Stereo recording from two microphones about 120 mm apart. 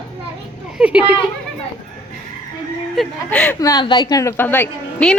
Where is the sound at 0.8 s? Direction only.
10° right (ahead or behind).